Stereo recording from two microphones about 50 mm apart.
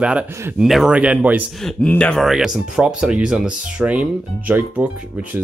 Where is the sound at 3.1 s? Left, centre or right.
Centre.